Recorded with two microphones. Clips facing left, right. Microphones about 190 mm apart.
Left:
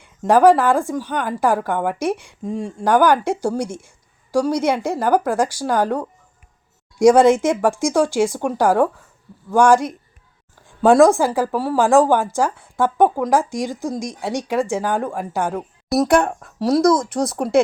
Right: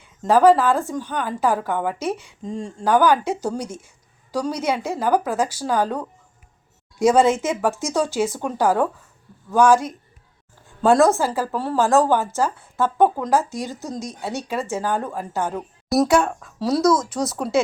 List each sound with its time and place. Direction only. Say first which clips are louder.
0.0 s a woman's voice: left 2 dB; 10° left (ahead or behind)